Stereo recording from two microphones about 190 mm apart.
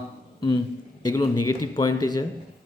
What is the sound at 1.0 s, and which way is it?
Speech, 20° left (ahead or behind).